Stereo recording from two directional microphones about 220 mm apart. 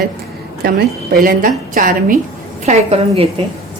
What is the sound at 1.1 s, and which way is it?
Speech, 40° right (ahead or behind).